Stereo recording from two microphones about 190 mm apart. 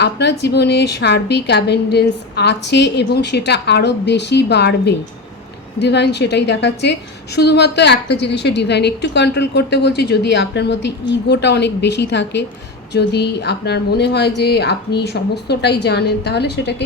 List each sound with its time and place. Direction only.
0.0 s a woman's voice: 60° left (ahead or behind)